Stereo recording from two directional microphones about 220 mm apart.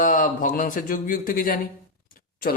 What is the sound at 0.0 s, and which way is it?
Speech, 35° left (ahead or behind).